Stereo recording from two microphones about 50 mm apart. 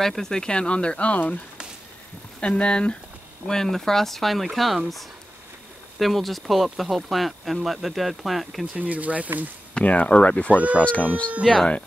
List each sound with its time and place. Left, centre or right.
0.0 s speech: centre; by 1.4 s left
2.4 s speech: left
3.4 s speech: centre
8.7 s speech: right
9.8 s speech: left
11.4 s speech: centre